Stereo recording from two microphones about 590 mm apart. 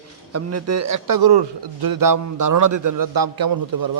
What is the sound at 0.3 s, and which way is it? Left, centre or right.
A man's voice, right.